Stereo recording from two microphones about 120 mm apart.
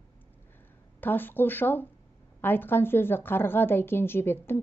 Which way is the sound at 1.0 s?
15° left (ahead or behind).